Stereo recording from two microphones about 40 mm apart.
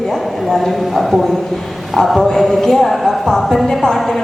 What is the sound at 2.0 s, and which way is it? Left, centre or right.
A woman's voice, centre.